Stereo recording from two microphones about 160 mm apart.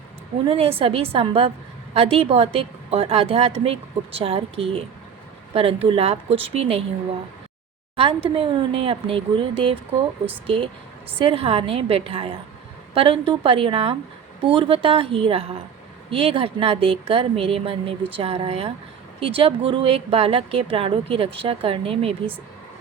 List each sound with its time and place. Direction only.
0.4 s speech: 35° right (ahead or behind)
7.9 s speech: 35° right (ahead or behind)